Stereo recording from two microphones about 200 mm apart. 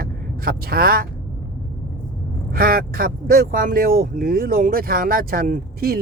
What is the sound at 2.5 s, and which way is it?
Speech, 45° right (ahead or behind).